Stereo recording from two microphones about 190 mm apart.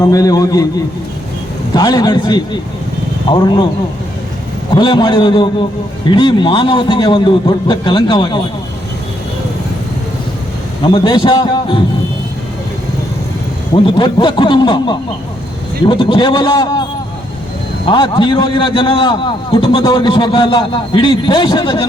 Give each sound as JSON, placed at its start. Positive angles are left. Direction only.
{"t": 0.1, "sound": "a man's voice", "side_deg": 20}
{"t": 1.7, "sound": "a man's voice", "side_deg": 20}
{"t": 4.7, "sound": "a man's voice", "side_deg": 25}
{"t": 10.8, "sound": "a man's voice", "side_deg": 25}
{"t": 13.7, "sound": "a man's voice", "side_deg": 25}
{"t": 17.8, "sound": "a man's voice", "side_deg": 25}